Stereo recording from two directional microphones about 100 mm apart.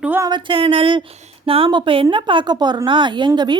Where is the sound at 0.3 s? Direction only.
50° right (ahead or behind).